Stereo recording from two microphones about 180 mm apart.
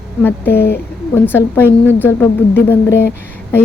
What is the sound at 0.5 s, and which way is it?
Music, 65° left (ahead or behind).